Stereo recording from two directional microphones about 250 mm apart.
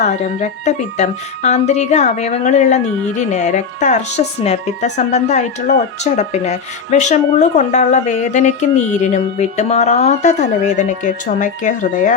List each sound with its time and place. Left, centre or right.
0.0 s a woman's voice: left